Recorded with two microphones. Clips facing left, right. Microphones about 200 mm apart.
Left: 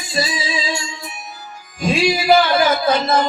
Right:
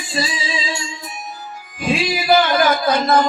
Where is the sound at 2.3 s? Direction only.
25° left (ahead or behind).